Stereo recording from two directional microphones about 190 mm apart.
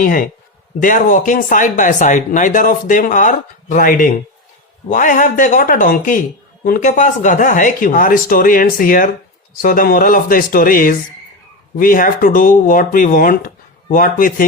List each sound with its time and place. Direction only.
0.0 s speech: 45° left (ahead or behind)